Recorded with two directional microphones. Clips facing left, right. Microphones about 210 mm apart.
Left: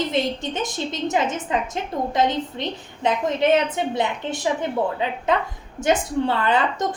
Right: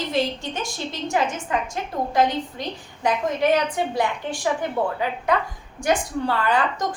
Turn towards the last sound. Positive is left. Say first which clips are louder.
# left 1 dB
turn(degrees=20)  # may be behind; listen again after turning